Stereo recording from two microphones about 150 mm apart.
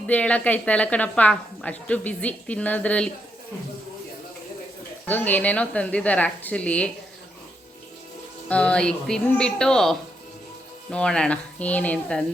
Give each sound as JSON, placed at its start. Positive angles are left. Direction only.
{"t": 0.1, "sound": "a woman's voice", "side_deg": 10}
{"t": 5.0, "sound": "a woman's voice", "side_deg": 10}
{"t": 8.4, "sound": "a woman's voice", "side_deg": 10}